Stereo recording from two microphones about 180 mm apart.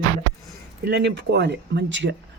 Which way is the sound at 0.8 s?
70° right (ahead or behind).